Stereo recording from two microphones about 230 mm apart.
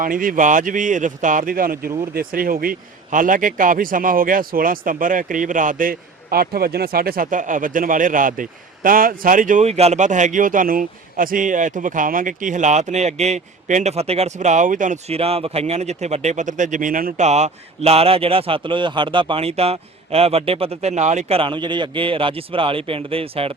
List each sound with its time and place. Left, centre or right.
0.0 s speech: right